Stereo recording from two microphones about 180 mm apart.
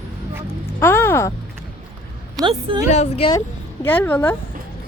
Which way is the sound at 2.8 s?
40° left (ahead or behind).